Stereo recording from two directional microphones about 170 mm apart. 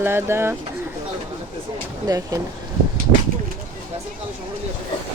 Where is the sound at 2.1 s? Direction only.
20° right (ahead or behind).